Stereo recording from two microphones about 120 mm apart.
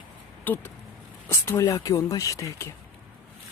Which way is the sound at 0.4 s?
15° left (ahead or behind).